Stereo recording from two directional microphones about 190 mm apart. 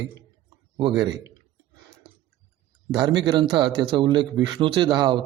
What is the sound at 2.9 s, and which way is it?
Speech, 25° right (ahead or behind).